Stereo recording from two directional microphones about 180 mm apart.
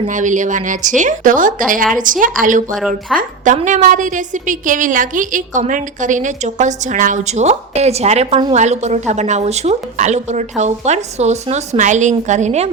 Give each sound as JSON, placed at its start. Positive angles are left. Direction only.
{"t": 0.1, "sound": "a woman's voice", "side_deg": -45}
{"t": 2.7, "sound": "a woman's voice", "side_deg": -5}
{"t": 3.2, "sound": "a woman's voice", "side_deg": -45}